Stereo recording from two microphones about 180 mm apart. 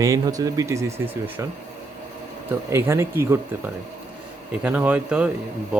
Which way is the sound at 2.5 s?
15° right (ahead or behind).